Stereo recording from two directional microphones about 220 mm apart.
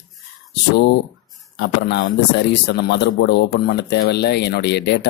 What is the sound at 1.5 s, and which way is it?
A man's voice, 50° left (ahead or behind).